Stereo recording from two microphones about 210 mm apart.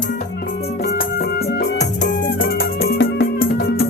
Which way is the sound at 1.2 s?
50° left (ahead or behind).